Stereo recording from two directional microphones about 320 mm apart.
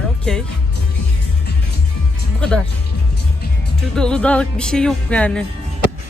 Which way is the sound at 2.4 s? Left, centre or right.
Centre.